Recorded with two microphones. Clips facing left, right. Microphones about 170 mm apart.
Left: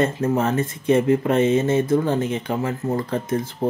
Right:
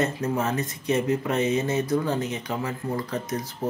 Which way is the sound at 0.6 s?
55° left (ahead or behind).